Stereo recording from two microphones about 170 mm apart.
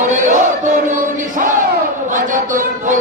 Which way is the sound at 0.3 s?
45° right (ahead or behind).